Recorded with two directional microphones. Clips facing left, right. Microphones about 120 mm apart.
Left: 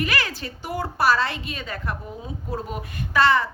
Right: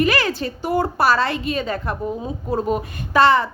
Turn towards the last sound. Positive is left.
turn(degrees=-25)  # may be behind; listen again after turning